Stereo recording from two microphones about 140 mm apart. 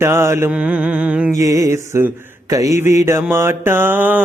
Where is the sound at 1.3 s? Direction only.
20° right (ahead or behind).